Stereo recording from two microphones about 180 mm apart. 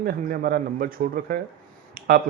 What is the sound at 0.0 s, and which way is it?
A man's voice, 55° right (ahead or behind).